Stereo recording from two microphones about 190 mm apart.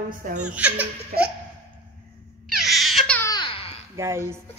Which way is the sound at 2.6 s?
Centre (ahead or behind).